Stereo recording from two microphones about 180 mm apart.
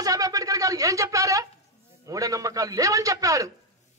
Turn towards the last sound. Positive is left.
turn(degrees=-20)  # may be behind; listen again after turning